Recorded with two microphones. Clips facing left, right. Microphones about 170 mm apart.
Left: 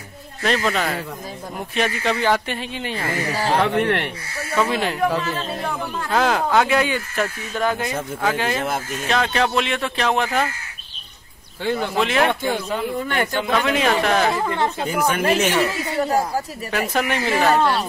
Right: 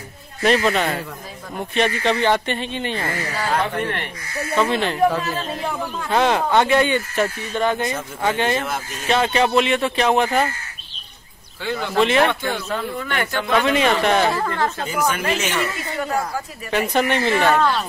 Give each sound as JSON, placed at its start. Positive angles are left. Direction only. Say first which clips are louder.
{"t": 0.4, "sound": "speech", "louder": "right 3 dB", "side_deg": -5}
{"t": 3.3, "sound": "speech", "louder": "left 2 dB", "side_deg": 30}
{"t": 3.6, "sound": "speech", "louder": "left 5 dB", "side_deg": 75}
{"t": 4.6, "sound": "speech", "louder": "right 2 dB", "side_deg": 5}
{"t": 11.9, "sound": "speech", "louder": "right 4 dB", "side_deg": 0}
{"t": 12.4, "sound": "speech", "louder": "left 2 dB", "side_deg": 15}
{"t": 12.9, "sound": "a woman's voice", "louder": "left 2 dB", "side_deg": 35}
{"t": 13.5, "sound": "speech", "louder": "right 3 dB", "side_deg": 0}
{"t": 14.3, "sound": "speech", "louder": "left 1 dB", "side_deg": 20}
{"t": 15.1, "sound": "speech", "louder": "left 4 dB", "side_deg": 50}
{"t": 16.0, "sound": "a woman's voice", "louder": "left 4 dB", "side_deg": 35}
{"t": 16.7, "sound": "speech", "louder": "right 3 dB", "side_deg": 0}